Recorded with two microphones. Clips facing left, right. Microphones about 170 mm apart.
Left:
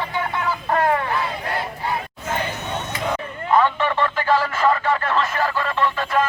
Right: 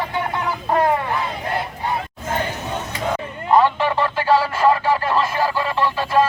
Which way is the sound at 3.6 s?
10° right (ahead or behind).